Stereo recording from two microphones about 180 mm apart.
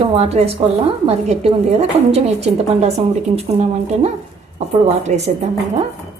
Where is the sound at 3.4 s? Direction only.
35° right (ahead or behind).